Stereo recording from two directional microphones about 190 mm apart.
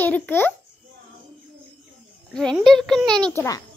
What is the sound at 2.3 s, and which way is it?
A child's voice, centre (ahead or behind).